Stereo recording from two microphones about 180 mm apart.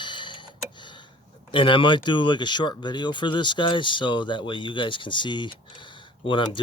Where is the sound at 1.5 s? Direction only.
30° left (ahead or behind).